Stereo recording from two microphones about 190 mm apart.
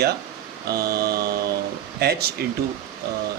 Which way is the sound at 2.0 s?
55° right (ahead or behind).